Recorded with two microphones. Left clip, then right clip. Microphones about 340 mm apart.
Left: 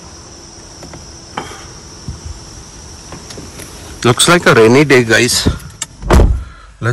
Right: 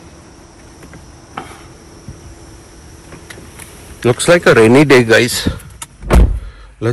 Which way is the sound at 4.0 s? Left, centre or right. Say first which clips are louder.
Left 1 dB; centre.